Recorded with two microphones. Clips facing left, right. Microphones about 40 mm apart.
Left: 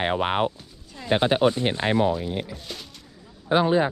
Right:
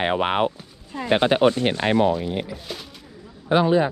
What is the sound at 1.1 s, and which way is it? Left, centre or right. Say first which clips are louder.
Speech: right 2 dB; right.